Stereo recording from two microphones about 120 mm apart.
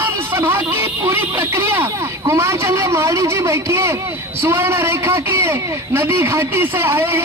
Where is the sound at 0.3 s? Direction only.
15° right (ahead or behind).